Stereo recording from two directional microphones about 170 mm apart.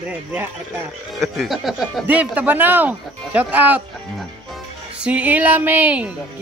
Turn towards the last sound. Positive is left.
turn(degrees=-10)  # may be behind; listen again after turning